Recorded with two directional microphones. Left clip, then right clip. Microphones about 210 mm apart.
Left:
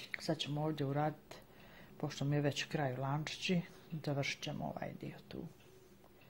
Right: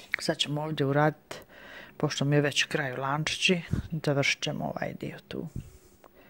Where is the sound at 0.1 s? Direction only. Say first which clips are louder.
Right 11 dB; 45° right (ahead or behind).